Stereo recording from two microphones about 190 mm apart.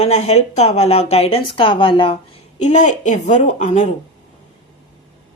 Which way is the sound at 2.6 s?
40° left (ahead or behind).